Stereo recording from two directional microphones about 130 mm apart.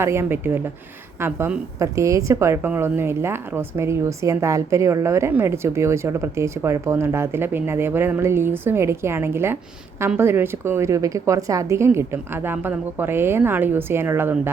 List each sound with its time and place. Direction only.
0.0 s a woman's voice: 20° right (ahead or behind)